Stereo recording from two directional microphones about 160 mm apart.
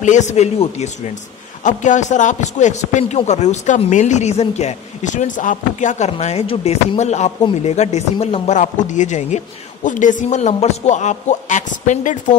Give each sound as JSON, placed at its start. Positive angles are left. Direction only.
{"t": 0.0, "sound": "a man's voice", "side_deg": 45}